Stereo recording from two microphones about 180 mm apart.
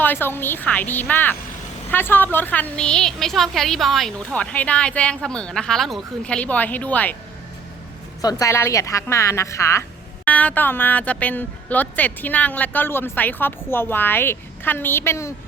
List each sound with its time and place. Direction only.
0.0 s a woman's voice: 10° left (ahead or behind)
8.2 s speech: 20° left (ahead or behind)